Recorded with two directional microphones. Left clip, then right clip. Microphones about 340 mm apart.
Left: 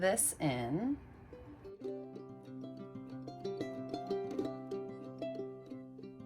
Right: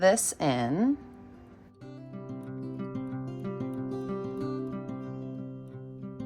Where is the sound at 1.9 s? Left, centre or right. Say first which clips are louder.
Right 5 dB; centre.